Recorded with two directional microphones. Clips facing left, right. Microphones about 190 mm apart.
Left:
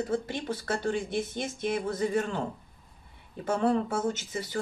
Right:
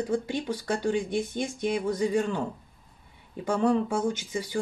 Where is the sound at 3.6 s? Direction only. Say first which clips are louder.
Right 2 dB; 15° right (ahead or behind).